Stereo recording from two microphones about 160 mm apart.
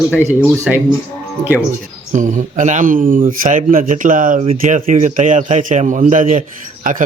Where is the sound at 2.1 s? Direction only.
50° right (ahead or behind).